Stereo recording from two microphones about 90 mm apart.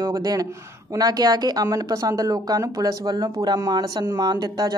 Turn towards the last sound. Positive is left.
turn(degrees=-50)  # may be behind; listen again after turning